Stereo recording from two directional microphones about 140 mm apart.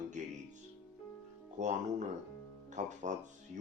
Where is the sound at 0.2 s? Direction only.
60° right (ahead or behind).